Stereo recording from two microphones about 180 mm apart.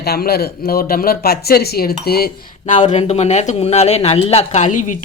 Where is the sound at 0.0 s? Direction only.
60° left (ahead or behind).